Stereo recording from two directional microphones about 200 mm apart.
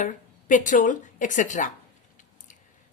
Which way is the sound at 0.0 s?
40° left (ahead or behind).